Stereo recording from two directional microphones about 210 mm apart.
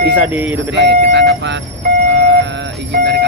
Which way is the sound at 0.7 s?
55° right (ahead or behind).